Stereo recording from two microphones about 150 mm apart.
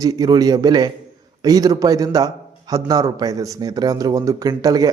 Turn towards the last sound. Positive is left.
turn(degrees=-25)  # may be behind; listen again after turning